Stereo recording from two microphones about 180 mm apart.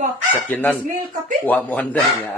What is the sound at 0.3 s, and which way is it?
Speech, 10° left (ahead or behind).